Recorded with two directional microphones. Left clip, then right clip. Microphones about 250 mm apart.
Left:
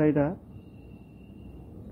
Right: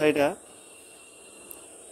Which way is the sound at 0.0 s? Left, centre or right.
Right.